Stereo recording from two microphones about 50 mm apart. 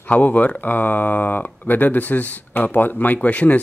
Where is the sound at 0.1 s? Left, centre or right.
Left.